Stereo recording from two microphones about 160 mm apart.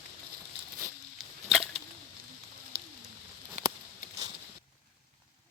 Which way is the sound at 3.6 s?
45° right (ahead or behind).